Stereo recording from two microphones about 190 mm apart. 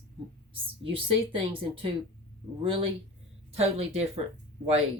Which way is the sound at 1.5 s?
30° right (ahead or behind).